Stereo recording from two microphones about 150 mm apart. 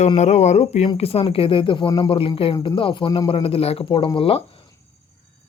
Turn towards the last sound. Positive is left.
turn(degrees=40)  # may be behind; listen again after turning